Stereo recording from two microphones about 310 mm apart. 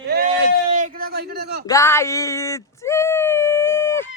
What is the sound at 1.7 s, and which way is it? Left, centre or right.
A man's voice, centre.